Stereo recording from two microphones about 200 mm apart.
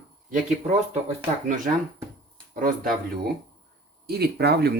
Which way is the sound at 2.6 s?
45° right (ahead or behind).